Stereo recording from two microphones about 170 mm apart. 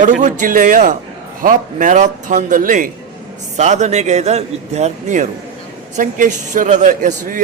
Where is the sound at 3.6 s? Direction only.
40° right (ahead or behind).